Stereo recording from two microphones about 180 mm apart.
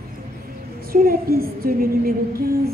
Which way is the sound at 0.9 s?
55° right (ahead or behind).